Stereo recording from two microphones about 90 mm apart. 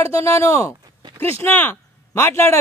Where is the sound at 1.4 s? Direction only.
25° left (ahead or behind).